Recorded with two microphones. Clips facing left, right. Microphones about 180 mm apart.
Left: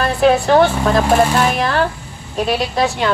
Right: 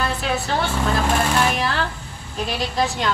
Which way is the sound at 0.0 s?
60° left (ahead or behind).